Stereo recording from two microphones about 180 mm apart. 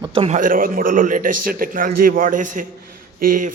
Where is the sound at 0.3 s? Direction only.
50° right (ahead or behind).